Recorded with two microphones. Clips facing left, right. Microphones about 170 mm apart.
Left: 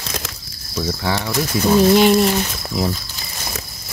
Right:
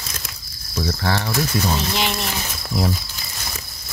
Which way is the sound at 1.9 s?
50° left (ahead or behind).